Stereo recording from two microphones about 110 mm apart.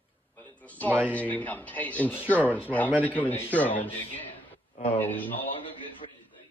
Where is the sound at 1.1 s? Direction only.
15° left (ahead or behind).